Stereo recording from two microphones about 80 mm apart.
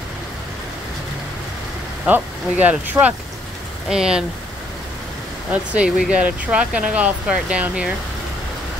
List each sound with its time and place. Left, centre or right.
2.0 s speech: centre
5.5 s speech: centre